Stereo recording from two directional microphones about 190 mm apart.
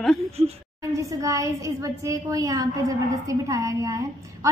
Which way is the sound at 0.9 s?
15° right (ahead or behind).